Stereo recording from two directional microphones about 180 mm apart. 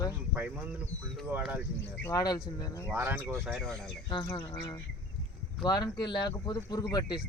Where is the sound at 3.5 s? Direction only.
Centre (ahead or behind).